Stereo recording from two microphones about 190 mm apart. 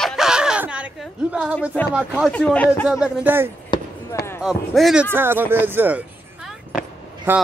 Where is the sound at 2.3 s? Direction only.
5° left (ahead or behind).